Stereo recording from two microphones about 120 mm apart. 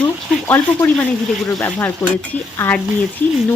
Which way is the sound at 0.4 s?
15° left (ahead or behind).